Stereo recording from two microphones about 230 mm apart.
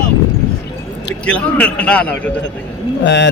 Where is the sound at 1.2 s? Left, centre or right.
Centre.